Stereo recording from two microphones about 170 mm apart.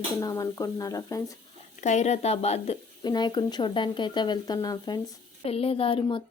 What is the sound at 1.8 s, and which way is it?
Speech, 45° left (ahead or behind).